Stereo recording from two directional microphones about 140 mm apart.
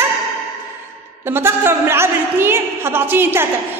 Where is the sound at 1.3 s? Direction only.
15° right (ahead or behind).